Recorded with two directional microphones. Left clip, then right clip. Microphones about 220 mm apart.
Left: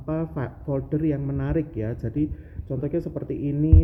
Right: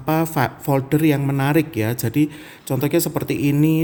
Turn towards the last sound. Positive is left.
turn(degrees=-50)  # may be behind; listen again after turning